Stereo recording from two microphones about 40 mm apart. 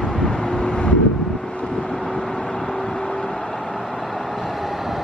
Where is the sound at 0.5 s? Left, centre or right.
Left.